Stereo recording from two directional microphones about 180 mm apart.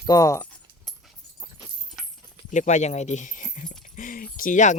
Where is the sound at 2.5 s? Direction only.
40° left (ahead or behind).